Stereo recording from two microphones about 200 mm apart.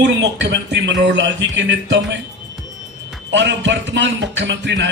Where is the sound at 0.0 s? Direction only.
60° right (ahead or behind).